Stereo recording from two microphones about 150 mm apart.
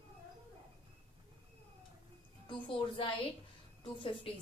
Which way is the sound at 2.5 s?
35° left (ahead or behind).